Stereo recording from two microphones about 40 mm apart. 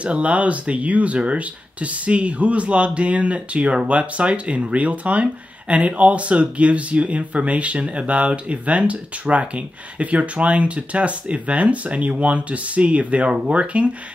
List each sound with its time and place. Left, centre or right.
0.0 s speech: right